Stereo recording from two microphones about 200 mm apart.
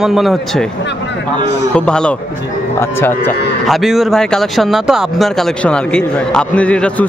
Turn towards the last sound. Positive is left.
turn(degrees=5)  # may be behind; listen again after turning